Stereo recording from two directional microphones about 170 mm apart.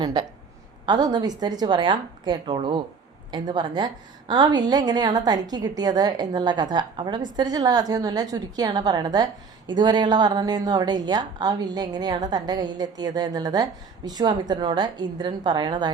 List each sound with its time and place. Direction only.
0.0 s a woman's voice: 25° right (ahead or behind)